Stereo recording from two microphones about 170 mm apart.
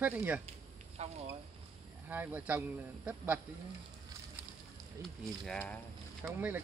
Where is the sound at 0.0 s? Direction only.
10° right (ahead or behind).